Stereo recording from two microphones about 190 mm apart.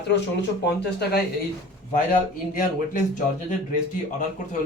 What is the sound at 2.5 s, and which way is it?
Speech, 45° left (ahead or behind).